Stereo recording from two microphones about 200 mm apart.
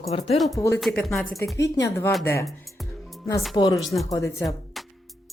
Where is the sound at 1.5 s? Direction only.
15° left (ahead or behind).